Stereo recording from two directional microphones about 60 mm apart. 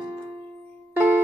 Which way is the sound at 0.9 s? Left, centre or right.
Right.